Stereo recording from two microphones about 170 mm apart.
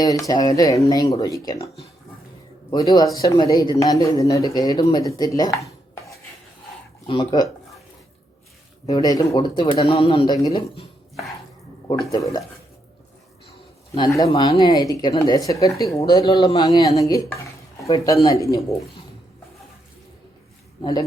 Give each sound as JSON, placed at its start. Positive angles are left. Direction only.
{"t": 0.0, "sound": "speech", "side_deg": 20}
{"t": 7.1, "sound": "speech", "side_deg": 30}
{"t": 8.9, "sound": "speech", "side_deg": 20}
{"t": 12.1, "sound": "speech", "side_deg": 20}
{"t": 13.9, "sound": "speech", "side_deg": 25}